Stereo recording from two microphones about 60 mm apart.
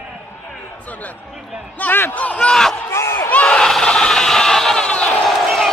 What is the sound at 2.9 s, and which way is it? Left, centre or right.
Crowd, left.